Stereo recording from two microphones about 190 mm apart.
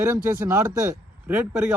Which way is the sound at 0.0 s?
15° right (ahead or behind).